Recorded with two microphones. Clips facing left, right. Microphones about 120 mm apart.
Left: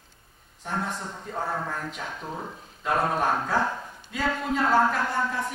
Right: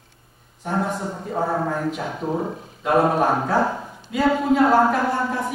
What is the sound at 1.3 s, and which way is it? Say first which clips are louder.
Speech: right 8 dB; 10° right (ahead or behind).